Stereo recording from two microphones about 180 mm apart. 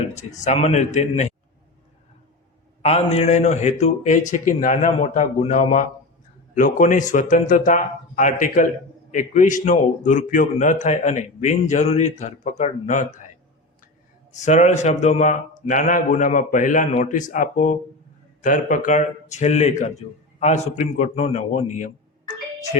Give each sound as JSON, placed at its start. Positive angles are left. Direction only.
{"t": 0.1, "sound": "a man's voice", "side_deg": 40}
{"t": 2.8, "sound": "a man's voice", "side_deg": 35}
{"t": 14.3, "sound": "a man's voice", "side_deg": 40}